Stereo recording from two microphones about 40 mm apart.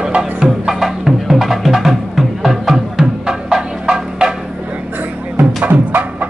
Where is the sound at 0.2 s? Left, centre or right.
Centre.